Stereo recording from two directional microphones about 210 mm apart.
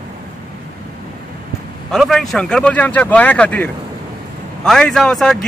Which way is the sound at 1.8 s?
Centre (ahead or behind).